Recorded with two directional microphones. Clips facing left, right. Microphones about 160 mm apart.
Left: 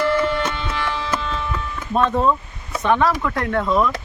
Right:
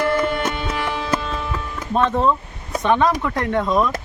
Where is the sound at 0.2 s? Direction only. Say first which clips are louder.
Even; 45° right (ahead or behind).